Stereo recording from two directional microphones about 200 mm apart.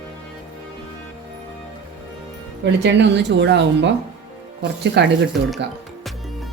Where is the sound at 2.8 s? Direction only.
60° right (ahead or behind).